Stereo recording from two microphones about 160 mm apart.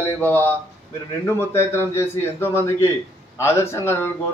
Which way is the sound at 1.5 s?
15° left (ahead or behind).